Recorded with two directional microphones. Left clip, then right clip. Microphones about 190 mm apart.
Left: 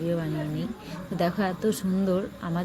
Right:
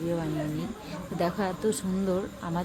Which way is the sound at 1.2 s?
5° left (ahead or behind).